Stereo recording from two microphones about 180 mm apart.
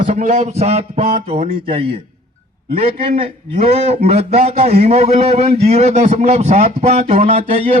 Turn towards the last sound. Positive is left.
turn(degrees=-30)  # may be behind; listen again after turning